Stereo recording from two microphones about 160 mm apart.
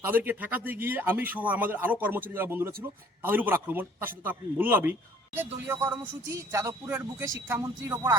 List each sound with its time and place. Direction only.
0.0 s a man's voice: 10° right (ahead or behind)